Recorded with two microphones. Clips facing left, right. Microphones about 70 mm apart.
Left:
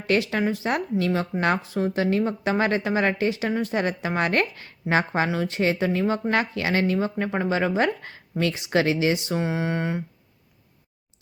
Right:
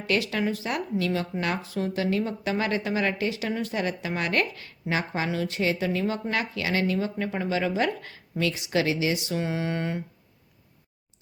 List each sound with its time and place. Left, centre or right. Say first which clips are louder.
0.1 s speech: left 3 dB; left